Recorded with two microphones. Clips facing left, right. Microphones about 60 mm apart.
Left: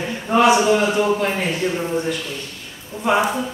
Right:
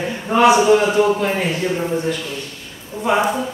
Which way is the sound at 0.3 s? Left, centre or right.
Right.